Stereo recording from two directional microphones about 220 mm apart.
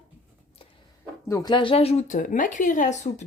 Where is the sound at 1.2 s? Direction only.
15° left (ahead or behind).